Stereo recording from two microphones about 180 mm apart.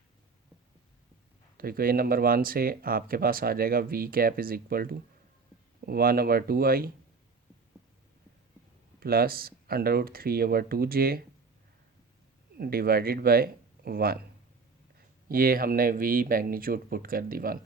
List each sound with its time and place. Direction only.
1.5 s speech: 55° right (ahead or behind)
9.0 s speech: 55° right (ahead or behind)
12.5 s speech: 60° right (ahead or behind)
15.3 s speech: 55° right (ahead or behind)